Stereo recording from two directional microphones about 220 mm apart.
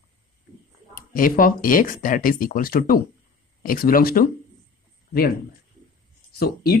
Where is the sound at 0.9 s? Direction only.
40° left (ahead or behind).